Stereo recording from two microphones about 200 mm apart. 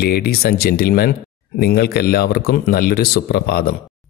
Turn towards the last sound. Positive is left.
turn(degrees=50)  # may be behind; listen again after turning